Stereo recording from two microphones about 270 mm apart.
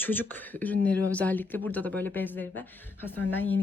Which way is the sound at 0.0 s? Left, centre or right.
Centre.